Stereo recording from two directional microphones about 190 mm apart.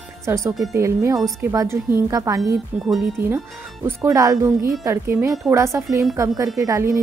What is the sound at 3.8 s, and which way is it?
Speech, 15° right (ahead or behind).